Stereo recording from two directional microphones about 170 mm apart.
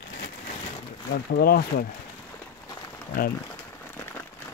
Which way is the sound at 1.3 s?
65° left (ahead or behind).